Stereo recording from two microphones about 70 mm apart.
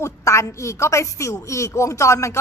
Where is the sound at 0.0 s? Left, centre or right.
Left.